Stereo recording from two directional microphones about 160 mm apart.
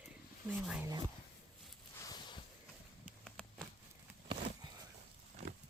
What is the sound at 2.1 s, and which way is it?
Boat, 30° left (ahead or behind).